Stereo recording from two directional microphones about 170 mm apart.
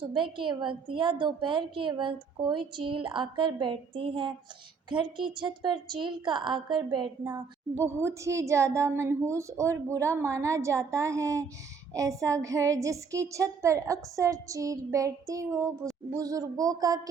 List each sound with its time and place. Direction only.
0.0 s a woman's voice: 30° right (ahead or behind)
7.9 s a woman's voice: 15° right (ahead or behind)